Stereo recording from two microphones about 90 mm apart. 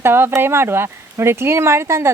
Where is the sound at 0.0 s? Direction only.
25° right (ahead or behind).